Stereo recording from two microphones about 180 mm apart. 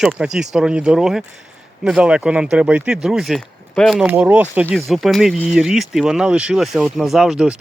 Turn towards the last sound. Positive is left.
turn(degrees=-5)  # may be behind; listen again after turning